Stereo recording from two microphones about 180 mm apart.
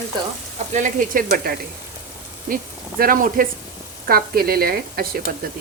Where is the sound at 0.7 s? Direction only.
50° right (ahead or behind).